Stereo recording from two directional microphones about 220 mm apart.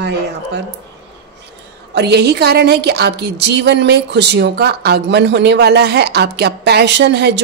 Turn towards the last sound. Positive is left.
turn(degrees=-50)  # may be behind; listen again after turning